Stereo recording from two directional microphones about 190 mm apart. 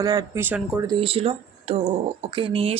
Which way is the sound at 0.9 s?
30° right (ahead or behind).